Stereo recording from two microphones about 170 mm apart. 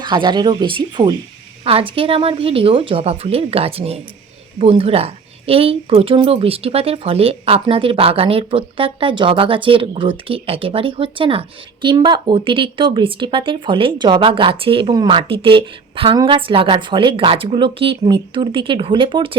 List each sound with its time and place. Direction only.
0.0 s a woman's voice: 25° right (ahead or behind)